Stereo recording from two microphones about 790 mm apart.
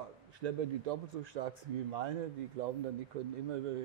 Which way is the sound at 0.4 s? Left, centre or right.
Right.